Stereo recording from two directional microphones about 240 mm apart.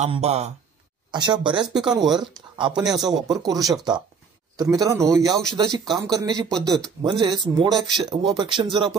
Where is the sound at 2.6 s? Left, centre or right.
Centre.